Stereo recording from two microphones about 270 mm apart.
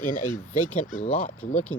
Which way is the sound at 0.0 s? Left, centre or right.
Left.